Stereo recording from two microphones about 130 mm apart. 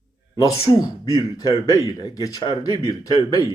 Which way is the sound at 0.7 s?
30° left (ahead or behind).